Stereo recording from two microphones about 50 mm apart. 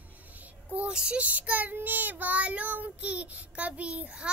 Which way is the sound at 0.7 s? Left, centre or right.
Centre.